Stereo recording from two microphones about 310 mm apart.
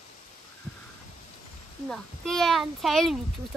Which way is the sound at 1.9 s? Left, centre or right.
Centre.